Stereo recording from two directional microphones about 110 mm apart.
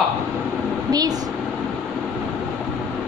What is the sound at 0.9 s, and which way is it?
Speech, 35° right (ahead or behind).